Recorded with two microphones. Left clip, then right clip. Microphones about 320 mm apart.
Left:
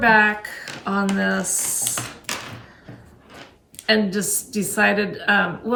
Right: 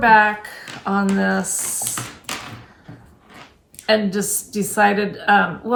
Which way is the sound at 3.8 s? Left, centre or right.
Centre.